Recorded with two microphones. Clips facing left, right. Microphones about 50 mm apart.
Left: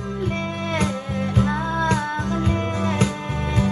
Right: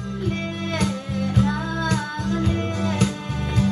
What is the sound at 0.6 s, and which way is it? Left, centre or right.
Music, left.